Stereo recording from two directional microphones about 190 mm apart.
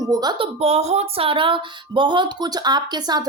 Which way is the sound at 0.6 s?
35° right (ahead or behind).